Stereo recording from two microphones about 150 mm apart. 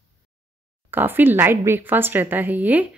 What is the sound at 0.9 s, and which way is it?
Speech, 15° right (ahead or behind).